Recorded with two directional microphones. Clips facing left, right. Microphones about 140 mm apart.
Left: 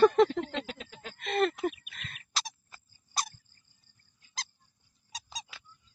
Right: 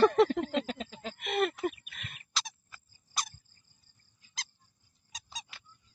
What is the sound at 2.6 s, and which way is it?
Squeak, 30° left (ahead or behind).